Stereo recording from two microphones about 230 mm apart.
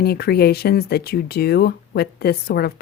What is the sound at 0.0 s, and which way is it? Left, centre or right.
Speech, left.